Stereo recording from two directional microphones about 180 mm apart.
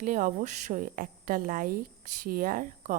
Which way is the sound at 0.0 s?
45° right (ahead or behind).